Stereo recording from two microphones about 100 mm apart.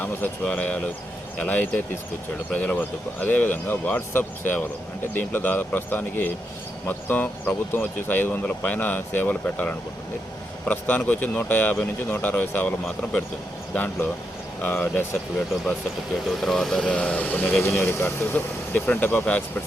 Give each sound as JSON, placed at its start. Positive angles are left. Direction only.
{"t": 0.0, "sound": "speech", "side_deg": 15}
{"t": 13.7, "sound": "speech", "side_deg": 20}
{"t": 16.4, "sound": "speech", "side_deg": 5}
{"t": 17.6, "sound": "speech", "side_deg": 25}